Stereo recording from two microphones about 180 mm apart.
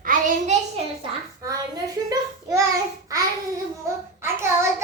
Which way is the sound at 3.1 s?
20° right (ahead or behind).